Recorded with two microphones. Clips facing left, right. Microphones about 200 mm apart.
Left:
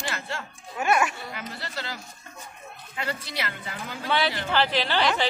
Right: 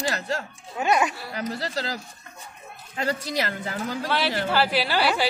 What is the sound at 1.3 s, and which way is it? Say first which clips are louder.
Speech: right 7 dB; 40° right (ahead or behind).